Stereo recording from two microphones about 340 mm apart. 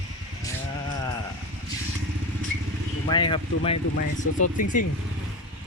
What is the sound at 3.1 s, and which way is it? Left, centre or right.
Speech, centre.